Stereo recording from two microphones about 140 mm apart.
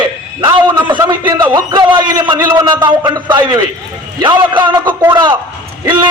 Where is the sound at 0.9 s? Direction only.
30° right (ahead or behind).